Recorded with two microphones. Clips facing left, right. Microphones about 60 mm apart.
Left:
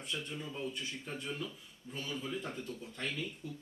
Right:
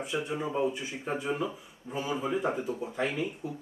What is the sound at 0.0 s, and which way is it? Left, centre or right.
Speech, centre.